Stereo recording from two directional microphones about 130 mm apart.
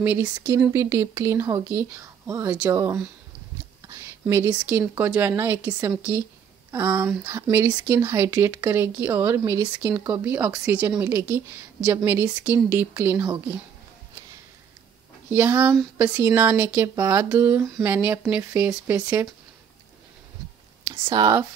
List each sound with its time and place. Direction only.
0.0 s a woman's voice: 15° right (ahead or behind)
0.7 s speech: 25° right (ahead or behind)
2.4 s a woman's voice: 10° right (ahead or behind)
2.7 s speech: 25° right (ahead or behind)
3.8 s a sound: 25° right (ahead or behind)
4.6 s a woman's voice: 15° right (ahead or behind)
15.3 s a woman's voice: 15° right (ahead or behind)
20.8 s speech: 30° right (ahead or behind)